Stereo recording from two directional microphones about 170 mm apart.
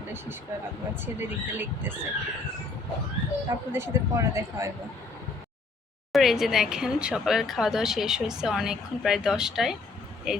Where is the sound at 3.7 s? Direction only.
15° right (ahead or behind).